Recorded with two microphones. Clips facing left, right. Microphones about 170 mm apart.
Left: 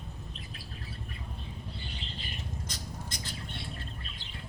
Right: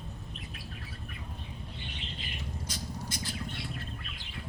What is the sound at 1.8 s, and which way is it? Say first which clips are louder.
Bird: even; 35° left (ahead or behind).